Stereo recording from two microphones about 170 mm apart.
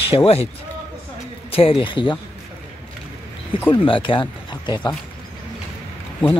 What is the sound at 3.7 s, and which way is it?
Speech, 30° left (ahead or behind).